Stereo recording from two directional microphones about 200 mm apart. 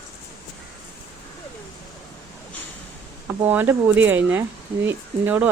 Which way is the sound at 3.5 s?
10° right (ahead or behind).